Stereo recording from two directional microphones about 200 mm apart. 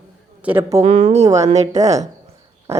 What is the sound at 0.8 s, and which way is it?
Speech, 30° right (ahead or behind).